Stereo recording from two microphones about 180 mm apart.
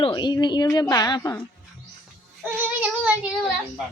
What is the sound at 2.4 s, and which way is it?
Child singing, 10° right (ahead or behind).